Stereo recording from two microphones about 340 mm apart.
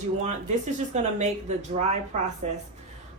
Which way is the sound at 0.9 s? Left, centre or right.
Centre.